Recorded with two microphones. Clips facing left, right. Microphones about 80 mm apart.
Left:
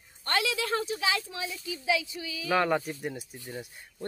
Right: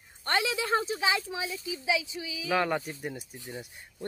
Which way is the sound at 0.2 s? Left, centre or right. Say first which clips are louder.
Even; right.